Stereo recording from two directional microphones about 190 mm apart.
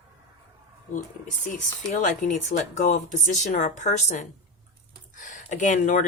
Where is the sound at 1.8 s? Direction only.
40° left (ahead or behind).